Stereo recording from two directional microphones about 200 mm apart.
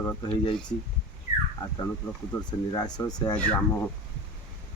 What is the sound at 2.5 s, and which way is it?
Speech, 20° left (ahead or behind).